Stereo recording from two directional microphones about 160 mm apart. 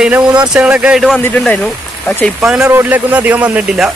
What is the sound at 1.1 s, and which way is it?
Speech, 10° left (ahead or behind).